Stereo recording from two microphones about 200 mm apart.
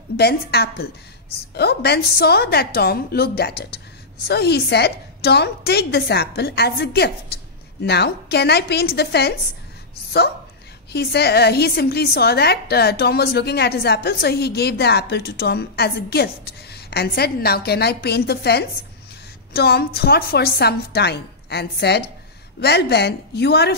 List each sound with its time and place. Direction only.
0.2 s a woman's voice: 50° left (ahead or behind)
10.9 s a woman's voice: 55° left (ahead or behind)